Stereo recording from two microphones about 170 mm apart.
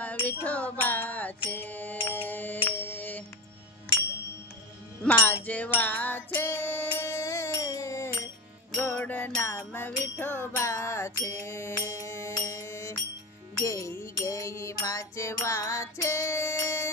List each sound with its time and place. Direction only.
0.3 s music: 10° left (ahead or behind)
5.0 s music: 10° left (ahead or behind)